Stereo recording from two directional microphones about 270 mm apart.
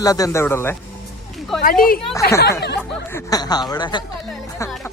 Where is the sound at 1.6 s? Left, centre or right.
Left.